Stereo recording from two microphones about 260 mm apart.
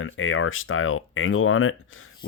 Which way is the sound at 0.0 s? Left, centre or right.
Left.